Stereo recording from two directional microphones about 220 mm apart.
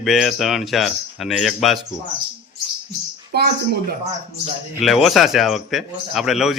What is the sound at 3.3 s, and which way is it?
Speech, 45° right (ahead or behind).